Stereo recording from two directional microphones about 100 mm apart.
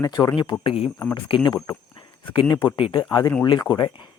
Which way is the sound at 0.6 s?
80° left.